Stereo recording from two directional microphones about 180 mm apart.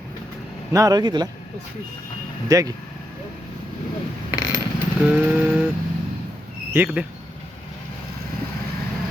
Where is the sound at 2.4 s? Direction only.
20° right (ahead or behind).